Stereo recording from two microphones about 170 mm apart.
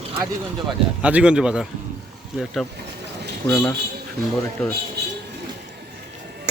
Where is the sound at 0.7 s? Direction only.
5° right (ahead or behind).